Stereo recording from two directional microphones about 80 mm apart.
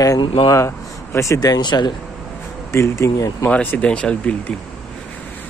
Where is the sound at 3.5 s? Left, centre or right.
Centre.